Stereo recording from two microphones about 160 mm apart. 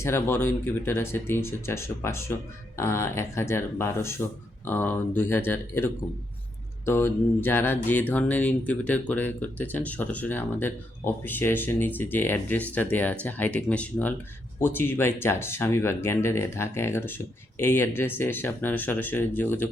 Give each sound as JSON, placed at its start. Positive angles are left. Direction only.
{"t": 0.0, "sound": "speech", "side_deg": 15}